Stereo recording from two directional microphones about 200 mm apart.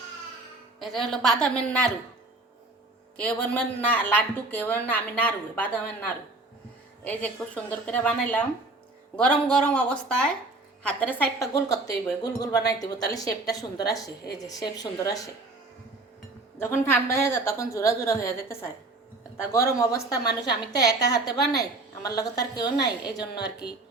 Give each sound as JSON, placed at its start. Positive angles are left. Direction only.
{"t": 0.8, "sound": "a woman's voice", "side_deg": 0}
{"t": 3.2, "sound": "a woman's voice", "side_deg": 5}
{"t": 16.6, "sound": "a woman's voice", "side_deg": 10}